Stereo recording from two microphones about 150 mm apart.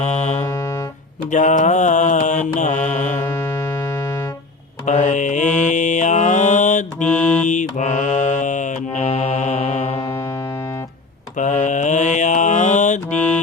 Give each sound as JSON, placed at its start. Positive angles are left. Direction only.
{"t": 0.0, "sound": "music", "side_deg": 50}
{"t": 0.3, "sound": "music", "side_deg": 20}
{"t": 1.3, "sound": "mantra", "side_deg": 55}
{"t": 3.2, "sound": "music", "side_deg": 20}
{"t": 4.9, "sound": "mantra", "side_deg": 55}
{"t": 7.0, "sound": "mantra", "side_deg": 10}
{"t": 7.4, "sound": "mantra", "side_deg": 55}
{"t": 10.0, "sound": "music", "side_deg": 20}
{"t": 11.3, "sound": "mantra", "side_deg": 55}
{"t": 13.1, "sound": "music", "side_deg": 10}